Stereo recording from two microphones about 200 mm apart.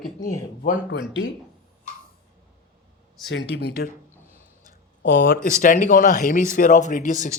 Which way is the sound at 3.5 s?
50° left (ahead or behind).